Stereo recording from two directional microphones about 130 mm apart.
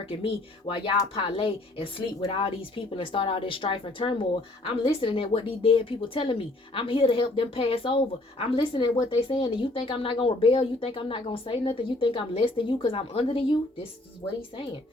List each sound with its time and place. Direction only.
0.0 s a woman's voice: 45° left (ahead or behind)